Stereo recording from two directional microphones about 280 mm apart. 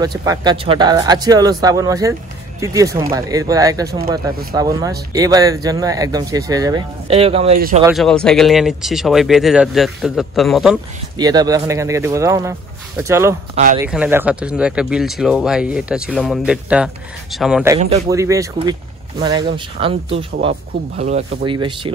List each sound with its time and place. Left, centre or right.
0.0 s speech: centre
7.5 s speech: right
7.8 s speech: centre
11.1 s speech: centre
17.7 s speech: right
18.1 s speech: centre